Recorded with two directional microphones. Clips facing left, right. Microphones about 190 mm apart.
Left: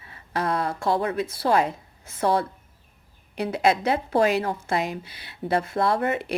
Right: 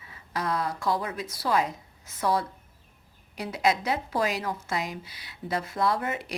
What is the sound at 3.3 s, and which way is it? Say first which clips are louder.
Speech: left 4 dB; 60° left (ahead or behind).